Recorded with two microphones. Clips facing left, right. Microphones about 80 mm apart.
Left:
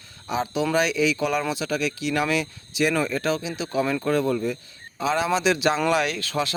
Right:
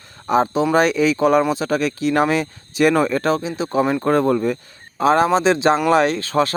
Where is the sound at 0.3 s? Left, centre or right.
Right.